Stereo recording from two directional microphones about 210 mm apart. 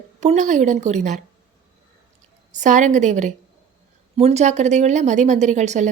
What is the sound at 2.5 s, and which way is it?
A woman's voice, 35° right (ahead or behind).